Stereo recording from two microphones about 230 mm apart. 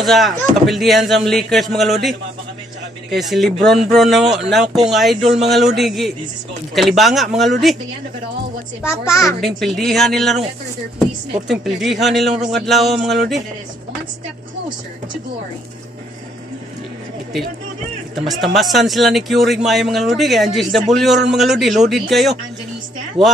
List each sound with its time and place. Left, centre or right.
0.0 s a man's voice: centre
3.1 s a man's voice: centre
9.1 s a man's voice: centre
11.6 s a man's voice: centre
18.2 s a man's voice: centre
23.2 s speech: right